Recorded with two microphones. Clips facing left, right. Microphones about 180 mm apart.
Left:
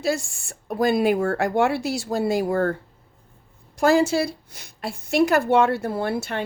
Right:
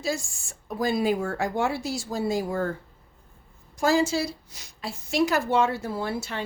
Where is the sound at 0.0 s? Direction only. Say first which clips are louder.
Left 5 dB; 65° left (ahead or behind).